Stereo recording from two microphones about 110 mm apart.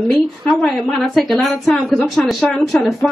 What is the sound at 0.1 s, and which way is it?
A woman's voice, 5° left (ahead or behind).